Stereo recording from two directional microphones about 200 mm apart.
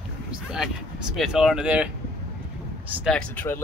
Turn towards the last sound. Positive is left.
turn(degrees=10)  # may be behind; listen again after turning